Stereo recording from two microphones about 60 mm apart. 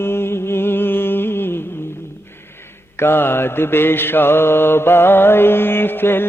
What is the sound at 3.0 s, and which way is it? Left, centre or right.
Mantra, left.